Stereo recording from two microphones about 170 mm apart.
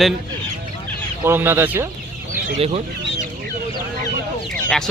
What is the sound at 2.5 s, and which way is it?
Speech, 35° right (ahead or behind).